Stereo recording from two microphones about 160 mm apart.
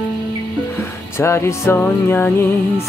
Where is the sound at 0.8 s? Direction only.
15° left (ahead or behind).